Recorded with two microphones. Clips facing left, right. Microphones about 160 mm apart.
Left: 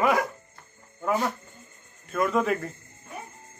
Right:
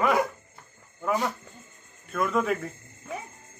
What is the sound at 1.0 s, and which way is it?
Speech, 5° left (ahead or behind).